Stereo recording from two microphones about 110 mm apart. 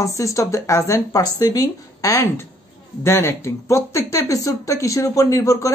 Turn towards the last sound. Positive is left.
turn(degrees=30)  # may be behind; listen again after turning